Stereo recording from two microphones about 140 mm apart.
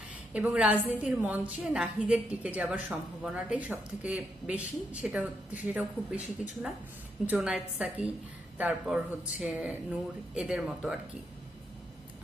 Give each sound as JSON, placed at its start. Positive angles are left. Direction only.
{"t": 0.3, "sound": "speech", "side_deg": -10}
{"t": 7.3, "sound": "speech", "side_deg": -5}